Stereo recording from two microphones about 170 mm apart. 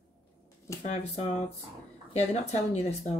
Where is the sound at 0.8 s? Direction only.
40° left (ahead or behind).